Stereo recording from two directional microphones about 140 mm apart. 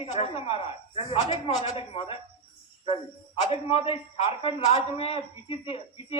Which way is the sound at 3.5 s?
45° left (ahead or behind).